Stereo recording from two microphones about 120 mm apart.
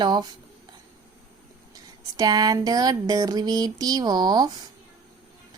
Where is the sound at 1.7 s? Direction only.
35° right (ahead or behind).